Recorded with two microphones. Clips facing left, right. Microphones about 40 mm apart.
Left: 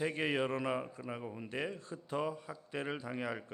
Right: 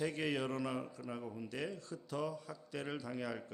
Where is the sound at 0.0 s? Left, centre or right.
Left.